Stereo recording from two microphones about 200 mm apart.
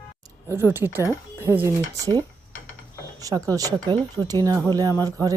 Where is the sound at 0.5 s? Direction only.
10° right (ahead or behind).